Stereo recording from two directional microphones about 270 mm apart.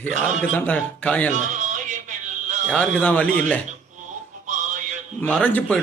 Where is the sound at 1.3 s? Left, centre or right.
Right.